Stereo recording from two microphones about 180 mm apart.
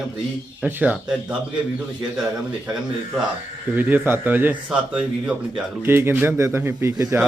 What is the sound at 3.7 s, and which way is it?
A man's voice, 10° right (ahead or behind).